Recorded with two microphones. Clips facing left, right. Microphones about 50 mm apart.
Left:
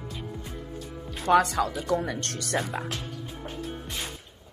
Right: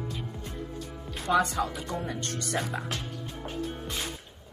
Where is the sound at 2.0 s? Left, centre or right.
Left.